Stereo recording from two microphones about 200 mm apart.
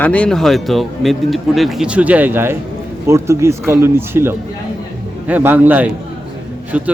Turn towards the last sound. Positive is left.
turn(degrees=-10)  # may be behind; listen again after turning